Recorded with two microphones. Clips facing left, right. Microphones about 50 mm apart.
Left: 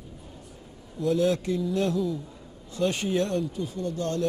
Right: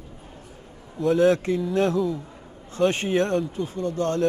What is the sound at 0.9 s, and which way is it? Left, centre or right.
A man's voice, right.